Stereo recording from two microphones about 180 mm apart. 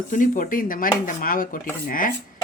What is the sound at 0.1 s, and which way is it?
A woman's voice, 45° left (ahead or behind).